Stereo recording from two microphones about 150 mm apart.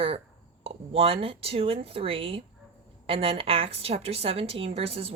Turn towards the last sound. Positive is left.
turn(degrees=-40)  # may be behind; listen again after turning